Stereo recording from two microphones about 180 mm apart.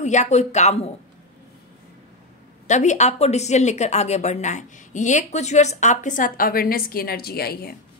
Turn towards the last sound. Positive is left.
turn(degrees=60)  # may be behind; listen again after turning